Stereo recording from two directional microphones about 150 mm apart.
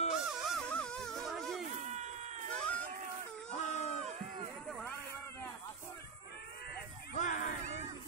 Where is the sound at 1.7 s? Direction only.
50° right (ahead or behind).